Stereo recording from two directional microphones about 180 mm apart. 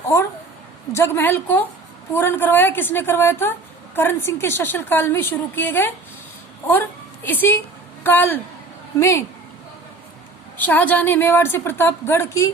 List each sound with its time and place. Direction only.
0.9 s a woman's voice: 10° left (ahead or behind)
10.6 s a woman's voice: 10° left (ahead or behind)